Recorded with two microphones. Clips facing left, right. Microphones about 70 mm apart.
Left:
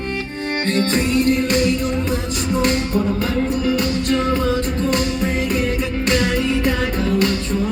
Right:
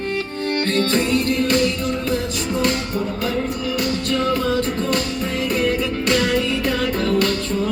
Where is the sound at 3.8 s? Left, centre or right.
Left.